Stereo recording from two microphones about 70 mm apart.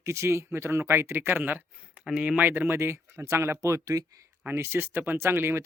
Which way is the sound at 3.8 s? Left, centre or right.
Right.